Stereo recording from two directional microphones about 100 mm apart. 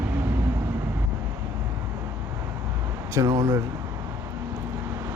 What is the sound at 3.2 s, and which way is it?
Speech, 45° right (ahead or behind).